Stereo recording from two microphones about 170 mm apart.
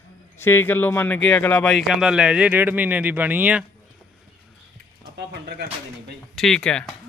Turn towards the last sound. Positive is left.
turn(degrees=5)  # may be behind; listen again after turning